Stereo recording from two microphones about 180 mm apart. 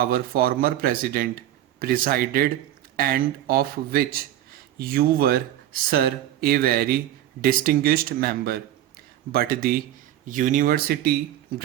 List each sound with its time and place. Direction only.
0.0 s speech: 55° right (ahead or behind)